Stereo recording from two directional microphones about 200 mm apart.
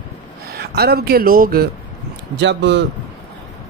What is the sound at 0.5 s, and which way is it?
Speech, 50° right (ahead or behind).